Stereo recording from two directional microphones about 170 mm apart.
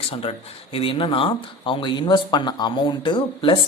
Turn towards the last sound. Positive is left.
turn(degrees=30)  # may be behind; listen again after turning